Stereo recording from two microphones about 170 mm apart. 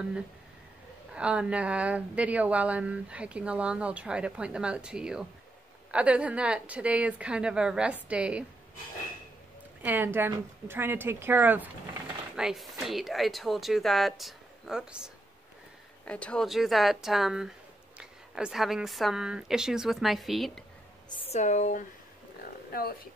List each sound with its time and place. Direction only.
1.1 s speech: 5° right (ahead or behind)
9.8 s speech: 10° right (ahead or behind)
16.1 s speech: 5° left (ahead or behind)
21.1 s a woman's voice: 35° left (ahead or behind)
22.7 s speech: 65° left (ahead or behind)